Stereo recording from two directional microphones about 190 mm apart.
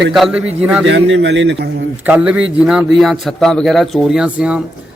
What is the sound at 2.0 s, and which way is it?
A man's voice, 5° right (ahead or behind).